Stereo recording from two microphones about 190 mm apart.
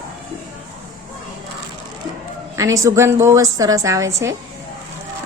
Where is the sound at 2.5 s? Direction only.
15° right (ahead or behind).